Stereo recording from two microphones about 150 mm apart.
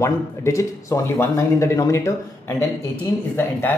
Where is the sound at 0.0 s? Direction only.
20° left (ahead or behind).